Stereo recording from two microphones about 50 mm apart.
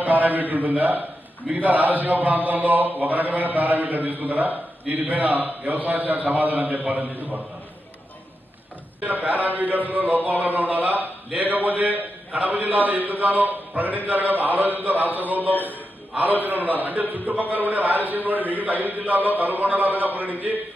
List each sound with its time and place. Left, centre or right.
0.0 s a man's voice: right
9.0 s a man's voice: right